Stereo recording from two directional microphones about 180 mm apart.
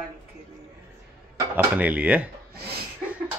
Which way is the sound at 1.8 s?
10° right (ahead or behind).